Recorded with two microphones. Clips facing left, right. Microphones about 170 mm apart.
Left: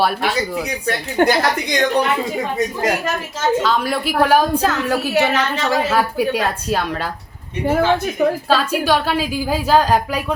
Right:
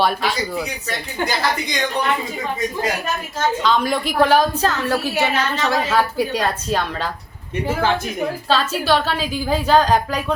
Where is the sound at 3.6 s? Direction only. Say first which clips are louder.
Even; 5° left (ahead or behind).